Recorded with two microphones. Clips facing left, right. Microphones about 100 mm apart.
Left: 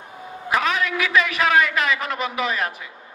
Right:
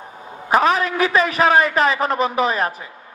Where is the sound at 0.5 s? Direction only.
35° right (ahead or behind).